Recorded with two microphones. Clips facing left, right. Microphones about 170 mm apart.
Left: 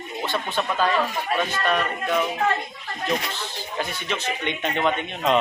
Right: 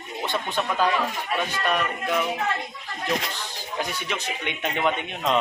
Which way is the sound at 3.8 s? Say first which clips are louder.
Left 1 dB; 10° right (ahead or behind).